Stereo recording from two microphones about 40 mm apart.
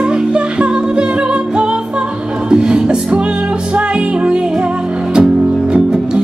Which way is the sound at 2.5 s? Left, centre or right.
Centre.